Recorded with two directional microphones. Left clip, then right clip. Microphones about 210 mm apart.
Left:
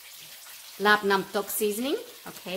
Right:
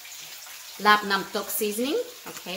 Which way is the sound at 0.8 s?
35° left (ahead or behind).